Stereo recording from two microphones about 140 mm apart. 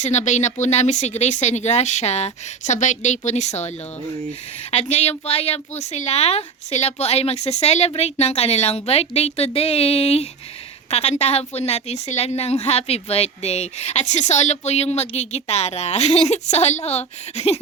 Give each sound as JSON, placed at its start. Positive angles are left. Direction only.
{"t": 0.0, "sound": "speech", "side_deg": 55}
{"t": 4.7, "sound": "a woman's voice", "side_deg": 50}